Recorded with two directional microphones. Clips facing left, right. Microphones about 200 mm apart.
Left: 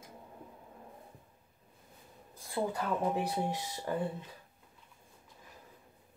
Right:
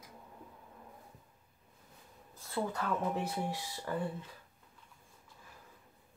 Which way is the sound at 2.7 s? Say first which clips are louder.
Left 2 dB; 15° left (ahead or behind).